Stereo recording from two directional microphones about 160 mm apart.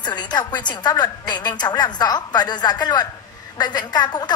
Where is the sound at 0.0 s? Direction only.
25° left (ahead or behind).